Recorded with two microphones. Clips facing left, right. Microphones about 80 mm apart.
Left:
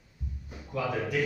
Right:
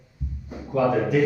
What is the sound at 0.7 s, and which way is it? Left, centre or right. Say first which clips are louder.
Speech: right 10 dB; right.